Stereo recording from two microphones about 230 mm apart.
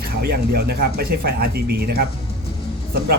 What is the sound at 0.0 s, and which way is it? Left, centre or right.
Speech, right.